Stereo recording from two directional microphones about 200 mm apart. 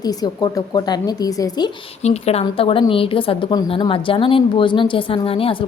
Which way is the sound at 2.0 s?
30° left (ahead or behind).